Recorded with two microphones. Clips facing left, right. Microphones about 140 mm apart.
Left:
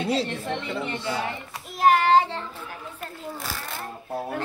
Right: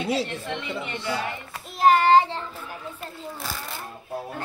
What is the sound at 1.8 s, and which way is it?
Child singing, centre (ahead or behind).